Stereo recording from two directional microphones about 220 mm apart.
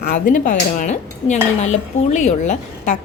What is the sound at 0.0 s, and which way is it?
A woman's voice, 40° left (ahead or behind).